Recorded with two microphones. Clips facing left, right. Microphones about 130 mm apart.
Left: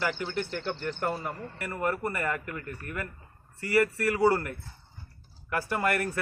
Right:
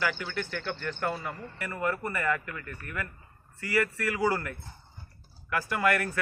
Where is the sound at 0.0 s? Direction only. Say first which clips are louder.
Left 1 dB; 30° left (ahead or behind).